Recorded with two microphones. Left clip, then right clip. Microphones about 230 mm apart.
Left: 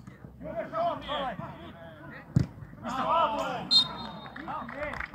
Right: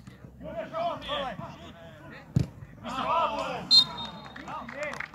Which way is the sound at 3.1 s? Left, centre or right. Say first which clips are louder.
Left 1 dB; right.